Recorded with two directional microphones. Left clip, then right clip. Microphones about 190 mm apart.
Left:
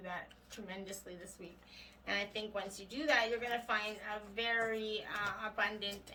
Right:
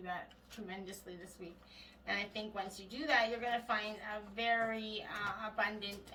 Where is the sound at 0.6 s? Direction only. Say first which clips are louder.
Left 1 dB; 45° left (ahead or behind).